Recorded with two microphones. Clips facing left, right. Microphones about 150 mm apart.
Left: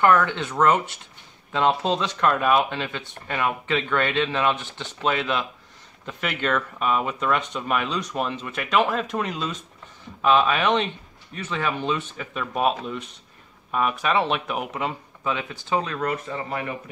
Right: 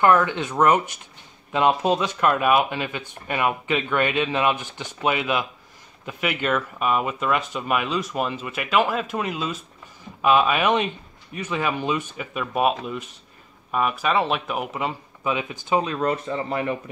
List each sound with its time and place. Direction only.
0.0 s speech: 10° right (ahead or behind)
15.2 s speech: 15° right (ahead or behind); by 16.6 s 30° right (ahead or behind)